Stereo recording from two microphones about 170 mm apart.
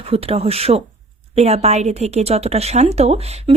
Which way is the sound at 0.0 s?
35° right (ahead or behind).